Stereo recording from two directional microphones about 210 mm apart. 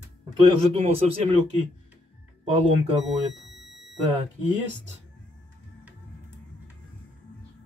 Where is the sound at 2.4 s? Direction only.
25° right (ahead or behind).